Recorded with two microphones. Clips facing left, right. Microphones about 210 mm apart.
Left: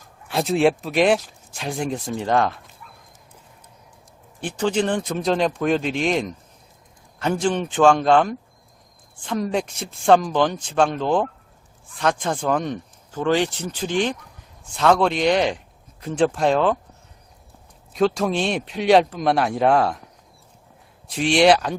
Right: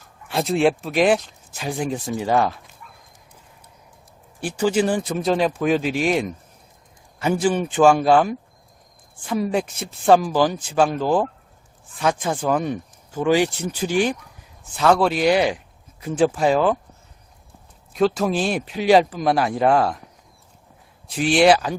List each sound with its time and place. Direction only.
0.3 s speech: centre (ahead or behind)
4.4 s speech: 5° right (ahead or behind)
17.9 s speech: centre (ahead or behind)
21.1 s speech: centre (ahead or behind)